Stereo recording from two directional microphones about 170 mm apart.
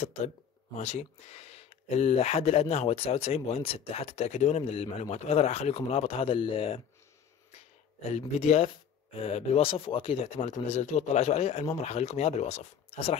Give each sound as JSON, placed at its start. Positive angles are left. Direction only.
{"t": 0.0, "sound": "speech", "side_deg": 40}
{"t": 8.4, "sound": "speech", "side_deg": 40}